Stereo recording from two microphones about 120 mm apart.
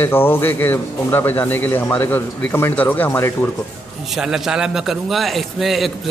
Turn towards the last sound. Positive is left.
turn(degrees=0)  # may be behind; listen again after turning